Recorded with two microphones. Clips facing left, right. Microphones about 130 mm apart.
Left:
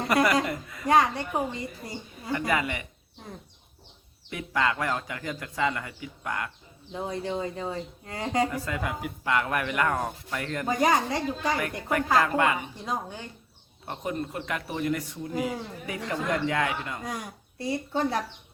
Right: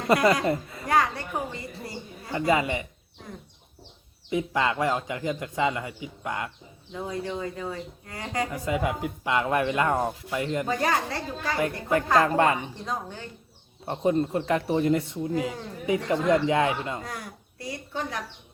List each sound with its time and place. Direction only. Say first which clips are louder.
0.1 s a man's voice: right 3 dB; 25° right (ahead or behind)
0.9 s speech: left 2 dB; 20° left (ahead or behind)
2.3 s a man's voice: right 3 dB; 25° right (ahead or behind)
4.3 s a man's voice: right 2 dB; 25° right (ahead or behind)
6.9 s speech: left 1 dB; 25° left (ahead or behind)
8.4 s a man's voice: right 4 dB; 20° right (ahead or behind)
10.7 s speech: left 6 dB; 15° left (ahead or behind)
12.2 s a woman's voice: right 3 dB; 30° right (ahead or behind)
12.8 s speech: even; 10° left (ahead or behind)
13.8 s a man's voice: right 8 dB; 30° right (ahead or behind)
17.0 s speech: left 2 dB; 20° left (ahead or behind)